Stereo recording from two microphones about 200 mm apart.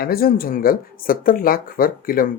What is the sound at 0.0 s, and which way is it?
Speech, 50° left (ahead or behind).